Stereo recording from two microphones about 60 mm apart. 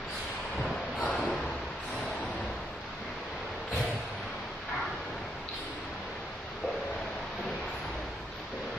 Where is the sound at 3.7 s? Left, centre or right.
Centre.